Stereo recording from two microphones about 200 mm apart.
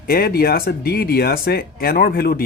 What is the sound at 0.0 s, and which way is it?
Speech, 50° left (ahead or behind).